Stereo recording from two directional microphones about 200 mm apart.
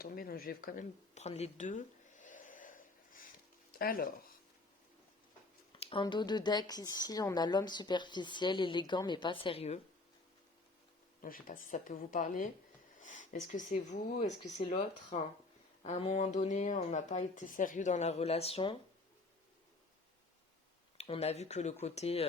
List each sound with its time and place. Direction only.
0.0 s a sound: 50° left (ahead or behind)
3.7 s speech: 45° left (ahead or behind)
5.7 s speech: 25° left (ahead or behind)
11.2 s speech: 45° left (ahead or behind); by 18.8 s 25° left (ahead or behind)
21.0 s speech: 30° left (ahead or behind)